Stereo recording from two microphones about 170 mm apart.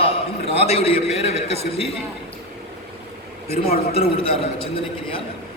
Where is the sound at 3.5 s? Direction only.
35° left (ahead or behind).